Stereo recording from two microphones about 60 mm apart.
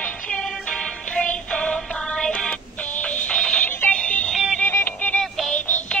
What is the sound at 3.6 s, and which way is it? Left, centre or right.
Synthetic singing, left.